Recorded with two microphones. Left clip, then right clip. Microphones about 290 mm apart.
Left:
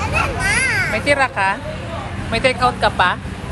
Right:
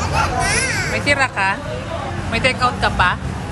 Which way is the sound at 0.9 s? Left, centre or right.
Centre.